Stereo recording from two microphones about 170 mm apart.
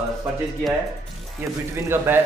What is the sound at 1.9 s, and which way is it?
Speech, 10° right (ahead or behind).